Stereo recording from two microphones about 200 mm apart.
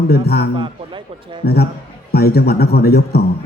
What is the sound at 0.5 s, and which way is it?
Speech, 25° right (ahead or behind).